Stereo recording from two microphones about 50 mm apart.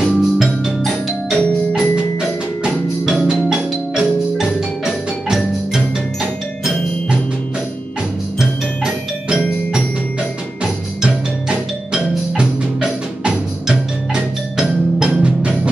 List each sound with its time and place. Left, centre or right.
0.0 s music: centre
2.6 s music: centre
10.6 s music: centre